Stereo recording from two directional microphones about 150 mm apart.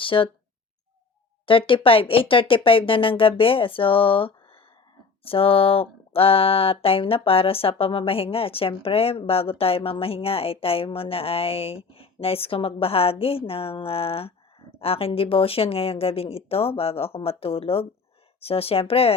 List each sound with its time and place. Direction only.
0.0 s speech: 35° left (ahead or behind)
1.5 s speech: 35° left (ahead or behind)